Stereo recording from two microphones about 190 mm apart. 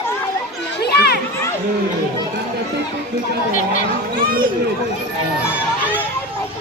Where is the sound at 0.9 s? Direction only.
55° left (ahead or behind).